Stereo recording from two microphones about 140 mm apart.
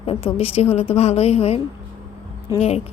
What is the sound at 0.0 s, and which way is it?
A woman's voice, 40° left (ahead or behind).